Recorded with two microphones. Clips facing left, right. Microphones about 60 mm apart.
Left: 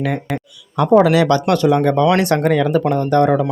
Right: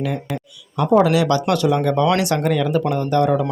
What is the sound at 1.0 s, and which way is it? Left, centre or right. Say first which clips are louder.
Speech: left 3 dB; left.